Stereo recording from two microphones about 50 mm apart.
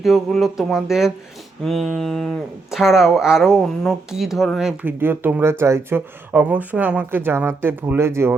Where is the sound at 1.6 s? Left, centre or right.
Centre.